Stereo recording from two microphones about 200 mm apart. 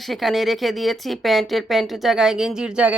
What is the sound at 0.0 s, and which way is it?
Speech, centre (ahead or behind).